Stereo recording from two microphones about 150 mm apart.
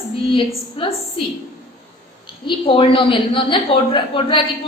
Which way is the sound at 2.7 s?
35° left (ahead or behind).